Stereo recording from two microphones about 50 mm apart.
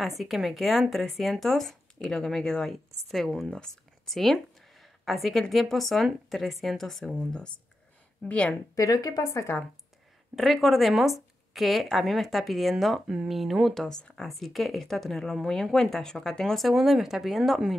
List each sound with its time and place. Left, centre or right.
0.0 s speech: centre
3.4 s speech: centre
4.1 s a sound: centre
5.5 s speech: centre
7.2 s speech: left
9.2 s a woman's voice: left
10.3 s speech: centre
13.0 s speech: centre
13.7 s speech: centre
16.7 s speech: centre